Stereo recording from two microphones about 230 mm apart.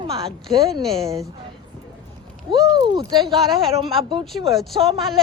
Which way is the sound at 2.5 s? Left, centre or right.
Centre.